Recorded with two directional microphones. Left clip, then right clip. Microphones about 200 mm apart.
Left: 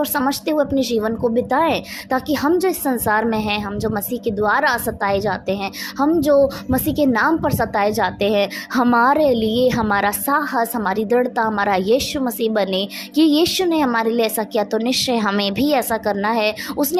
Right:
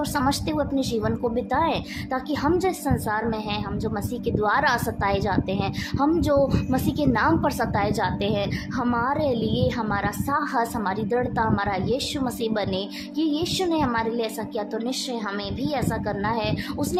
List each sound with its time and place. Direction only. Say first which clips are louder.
0.0 s a woman's voice: left 4 dB; 25° left (ahead or behind)